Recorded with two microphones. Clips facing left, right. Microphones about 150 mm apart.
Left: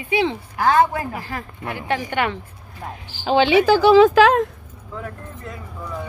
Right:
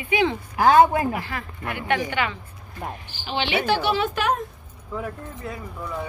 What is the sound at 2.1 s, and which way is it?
Speech, 55° left (ahead or behind).